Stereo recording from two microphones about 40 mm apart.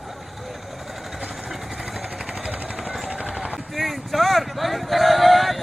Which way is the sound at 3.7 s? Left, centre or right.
Centre.